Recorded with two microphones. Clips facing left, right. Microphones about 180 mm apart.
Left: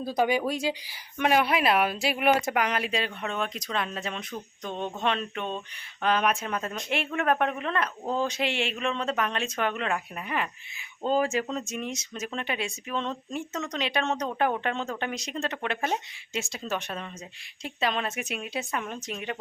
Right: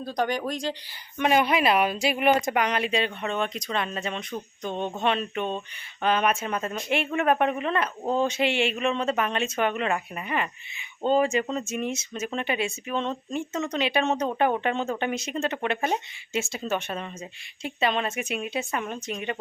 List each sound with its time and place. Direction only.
0.0 s speech: 5° left (ahead or behind)